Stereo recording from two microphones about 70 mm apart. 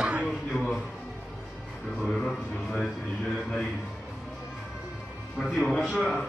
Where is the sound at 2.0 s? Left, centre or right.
Centre.